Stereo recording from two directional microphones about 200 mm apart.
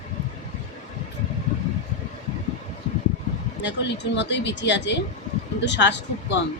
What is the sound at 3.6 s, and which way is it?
Speech, 60° left (ahead or behind).